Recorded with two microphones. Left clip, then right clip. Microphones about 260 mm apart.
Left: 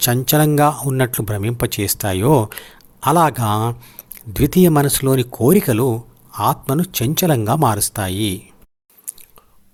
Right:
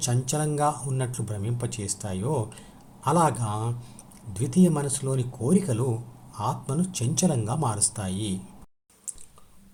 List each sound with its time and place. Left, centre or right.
0.0 s speech: left